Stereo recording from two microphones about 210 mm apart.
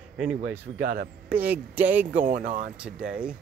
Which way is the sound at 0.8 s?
40° right (ahead or behind).